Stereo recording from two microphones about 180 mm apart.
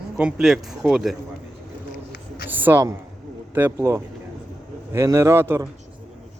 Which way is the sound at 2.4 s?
10° right (ahead or behind).